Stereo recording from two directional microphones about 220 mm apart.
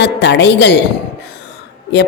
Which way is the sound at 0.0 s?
50° left (ahead or behind).